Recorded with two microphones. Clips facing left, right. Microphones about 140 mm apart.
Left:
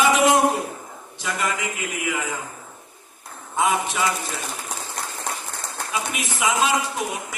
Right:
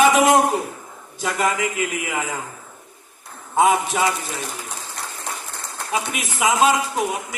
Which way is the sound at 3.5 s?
45° right (ahead or behind).